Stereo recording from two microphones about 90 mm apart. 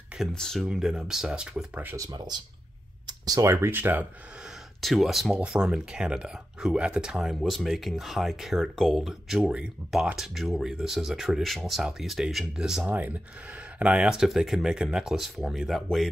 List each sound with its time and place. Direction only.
0.3 s speech: 5° left (ahead or behind)
0.7 s speech: 10° right (ahead or behind)
2.0 s speech: 45° right (ahead or behind)
3.1 s a sound: 45° right (ahead or behind)
3.4 s speech: 25° right (ahead or behind)
4.8 s speech: centre (ahead or behind)